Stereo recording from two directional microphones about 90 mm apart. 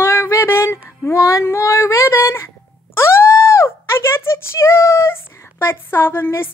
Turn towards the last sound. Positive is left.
turn(degrees=25)  # may be behind; listen again after turning